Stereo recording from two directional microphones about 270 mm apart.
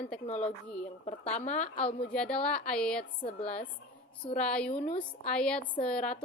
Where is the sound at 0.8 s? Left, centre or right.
Left.